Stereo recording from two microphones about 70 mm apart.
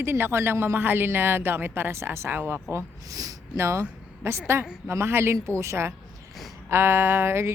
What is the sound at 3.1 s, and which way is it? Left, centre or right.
Speech, right.